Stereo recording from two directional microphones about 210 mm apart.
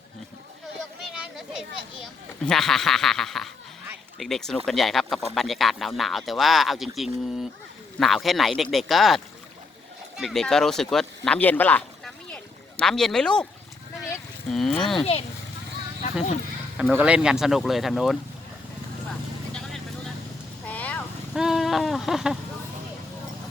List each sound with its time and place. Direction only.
1.4 s children playing: centre (ahead or behind)
3.8 s a sound: centre (ahead or behind)
4.6 s speech: centre (ahead or behind)
14.5 s speech: centre (ahead or behind)
16.7 s speech: 5° right (ahead or behind)
20.7 s a sound: 5° left (ahead or behind)
21.3 s speech: centre (ahead or behind)